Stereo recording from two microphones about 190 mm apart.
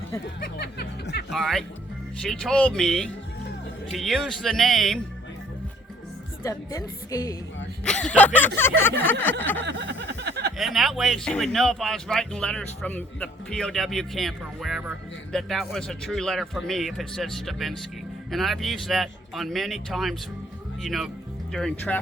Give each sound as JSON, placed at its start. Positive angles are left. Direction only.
{"t": 0.3, "sound": "music", "side_deg": 55}
{"t": 1.3, "sound": "speech", "side_deg": 0}
{"t": 6.4, "sound": "a woman's voice", "side_deg": 15}
{"t": 7.9, "sound": "a woman's voice", "side_deg": 5}
{"t": 9.6, "sound": "a sound", "side_deg": -65}
{"t": 10.6, "sound": "speech", "side_deg": 0}